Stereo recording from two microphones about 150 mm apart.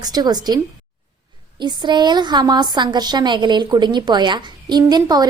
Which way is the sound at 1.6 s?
30° right (ahead or behind).